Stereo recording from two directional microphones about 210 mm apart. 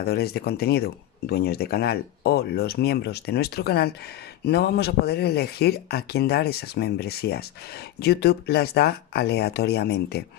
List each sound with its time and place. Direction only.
0.0 s speech: 50° left (ahead or behind)